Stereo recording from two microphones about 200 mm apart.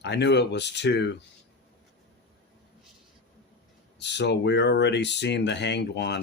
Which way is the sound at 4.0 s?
60° left (ahead or behind).